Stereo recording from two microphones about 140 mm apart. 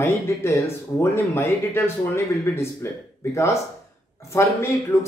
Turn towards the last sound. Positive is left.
turn(degrees=20)  # may be behind; listen again after turning